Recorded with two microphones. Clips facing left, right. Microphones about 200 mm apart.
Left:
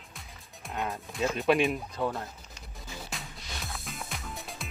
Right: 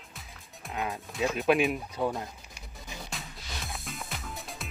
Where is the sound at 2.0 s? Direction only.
10° right (ahead or behind).